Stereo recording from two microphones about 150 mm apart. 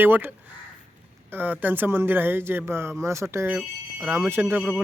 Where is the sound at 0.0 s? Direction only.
10° right (ahead or behind).